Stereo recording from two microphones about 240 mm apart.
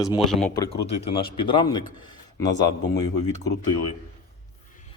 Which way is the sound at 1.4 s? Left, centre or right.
Centre.